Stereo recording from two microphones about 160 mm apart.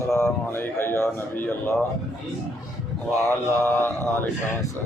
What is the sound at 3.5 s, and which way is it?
Speech, 15° left (ahead or behind).